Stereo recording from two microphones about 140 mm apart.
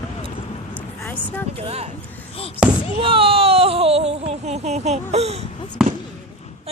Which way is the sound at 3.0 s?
40° right (ahead or behind).